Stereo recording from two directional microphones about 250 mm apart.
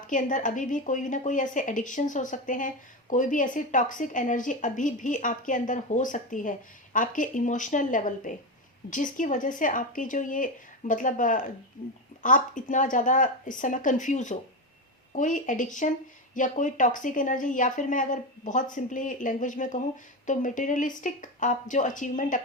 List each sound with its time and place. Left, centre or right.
0.1 s a woman's voice: left